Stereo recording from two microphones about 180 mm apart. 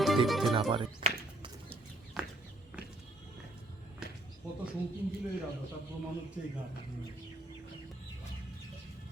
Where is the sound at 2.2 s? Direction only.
5° right (ahead or behind).